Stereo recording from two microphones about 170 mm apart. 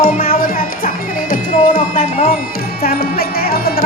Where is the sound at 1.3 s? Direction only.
55° left (ahead or behind).